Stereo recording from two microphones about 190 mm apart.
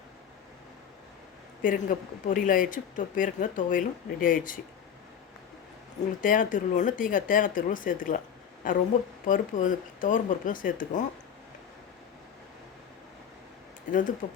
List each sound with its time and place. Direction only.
1.6 s speech: 45° left (ahead or behind)
6.2 s speech: 45° left (ahead or behind)
13.9 s speech: 45° left (ahead or behind)